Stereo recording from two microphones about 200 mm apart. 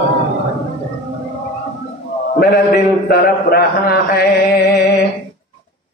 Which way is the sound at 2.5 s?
50° left (ahead or behind).